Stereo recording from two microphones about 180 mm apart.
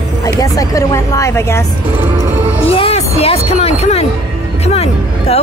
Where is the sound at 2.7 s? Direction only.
30° left (ahead or behind).